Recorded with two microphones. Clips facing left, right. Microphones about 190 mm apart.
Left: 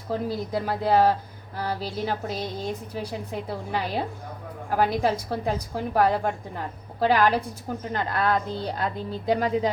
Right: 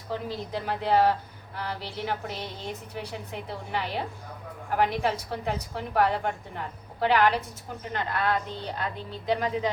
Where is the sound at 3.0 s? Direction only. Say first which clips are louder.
Left 5 dB; 35° left (ahead or behind).